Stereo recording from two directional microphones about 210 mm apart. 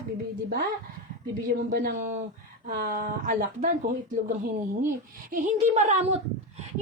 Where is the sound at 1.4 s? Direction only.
45° right (ahead or behind).